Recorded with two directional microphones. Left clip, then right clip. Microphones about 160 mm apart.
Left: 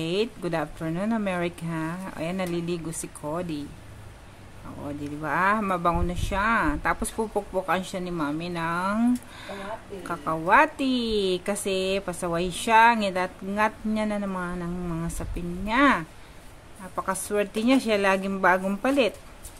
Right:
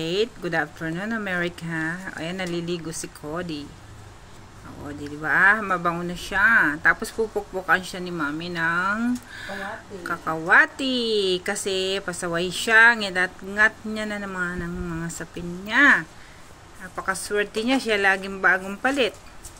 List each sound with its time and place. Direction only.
0.0 s speech: 25° left (ahead or behind)
5.2 s speech: 25° left (ahead or behind)
17.1 s speech: 25° left (ahead or behind)